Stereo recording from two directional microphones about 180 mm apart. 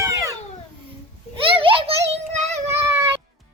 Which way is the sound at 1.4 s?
30° right (ahead or behind).